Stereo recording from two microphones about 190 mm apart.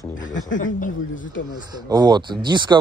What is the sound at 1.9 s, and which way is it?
Speech, 20° right (ahead or behind).